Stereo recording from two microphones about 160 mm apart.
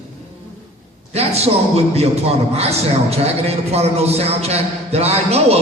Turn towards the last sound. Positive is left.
turn(degrees=-40)  # may be behind; listen again after turning